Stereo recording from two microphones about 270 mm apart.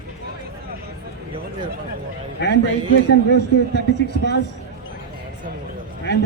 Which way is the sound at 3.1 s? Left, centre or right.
Left.